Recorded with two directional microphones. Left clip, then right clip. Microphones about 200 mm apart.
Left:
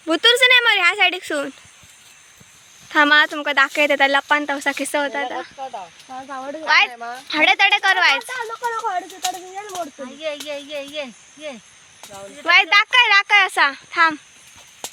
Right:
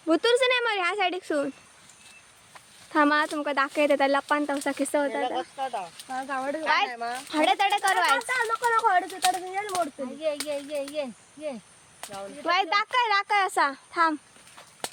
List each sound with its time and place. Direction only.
0.1 s a sound: 5° right (ahead or behind)
2.9 s speech: 5° right (ahead or behind)
5.5 s speech: 20° right (ahead or behind)
6.1 s speech: 10° left (ahead or behind)
6.9 s speech: 20° right (ahead or behind)
7.3 s speech: 10° left (ahead or behind)